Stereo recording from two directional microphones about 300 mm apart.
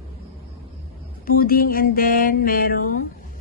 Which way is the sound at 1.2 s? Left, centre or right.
Left.